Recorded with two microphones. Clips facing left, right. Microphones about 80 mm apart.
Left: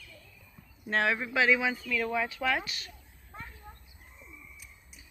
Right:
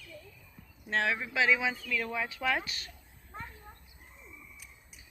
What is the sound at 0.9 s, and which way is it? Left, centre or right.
Speech, centre.